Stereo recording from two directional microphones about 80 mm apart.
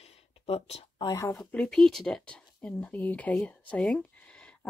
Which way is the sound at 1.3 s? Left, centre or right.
Centre.